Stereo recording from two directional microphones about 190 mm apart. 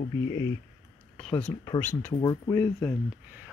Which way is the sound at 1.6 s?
10° left (ahead or behind).